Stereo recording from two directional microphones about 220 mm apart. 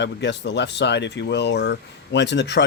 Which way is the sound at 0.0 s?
55° left (ahead or behind).